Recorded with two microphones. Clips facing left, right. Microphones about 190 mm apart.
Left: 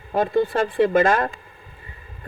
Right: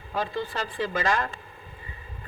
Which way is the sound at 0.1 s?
55° left (ahead or behind).